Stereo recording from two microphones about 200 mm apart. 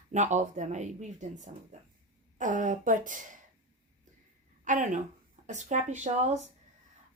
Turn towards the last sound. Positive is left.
turn(degrees=-35)  # may be behind; listen again after turning